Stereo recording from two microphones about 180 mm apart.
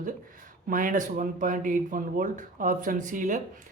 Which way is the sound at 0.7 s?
50° right (ahead or behind).